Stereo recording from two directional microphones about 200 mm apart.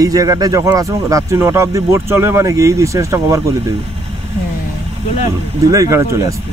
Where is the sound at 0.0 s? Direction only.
20° right (ahead or behind).